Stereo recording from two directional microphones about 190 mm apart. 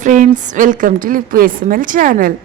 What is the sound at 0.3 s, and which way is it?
A woman's voice, 40° right (ahead or behind).